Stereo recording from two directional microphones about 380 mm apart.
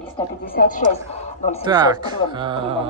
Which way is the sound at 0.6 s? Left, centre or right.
Left.